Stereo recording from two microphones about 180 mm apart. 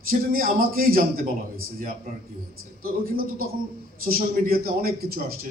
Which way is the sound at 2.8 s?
55° right (ahead or behind).